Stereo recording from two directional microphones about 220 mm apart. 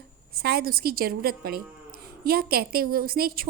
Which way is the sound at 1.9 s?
45° right (ahead or behind).